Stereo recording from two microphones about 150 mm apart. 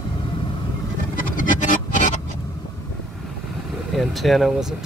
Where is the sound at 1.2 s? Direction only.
65° left (ahead or behind).